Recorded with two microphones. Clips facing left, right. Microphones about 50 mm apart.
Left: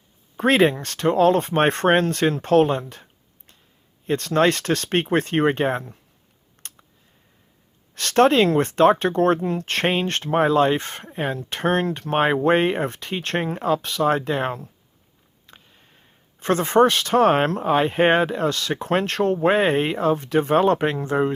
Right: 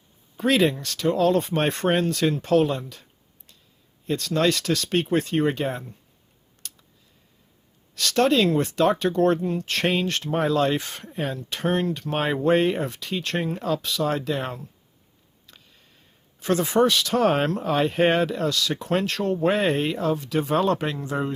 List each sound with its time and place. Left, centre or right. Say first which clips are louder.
0.3 s speech: left 3 dB; left
2.9 s a sound: left 3 dB; left
4.1 s speech: left 3 dB; left
6.6 s computer keyboard: left 1 dB; left
7.9 s speech: left 4 dB; left
9.4 s speech: left 2 dB; left
12.1 s speech: left 3 dB; left
15.4 s a sound: left 3 dB; left
16.4 s speech: left 3 dB; left